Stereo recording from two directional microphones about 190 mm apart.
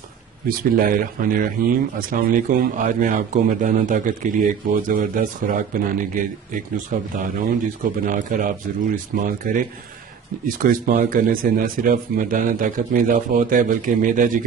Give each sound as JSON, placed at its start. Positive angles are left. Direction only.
{"t": 0.5, "sound": "a man's voice", "side_deg": -50}
{"t": 10.6, "sound": "a man's voice", "side_deg": -45}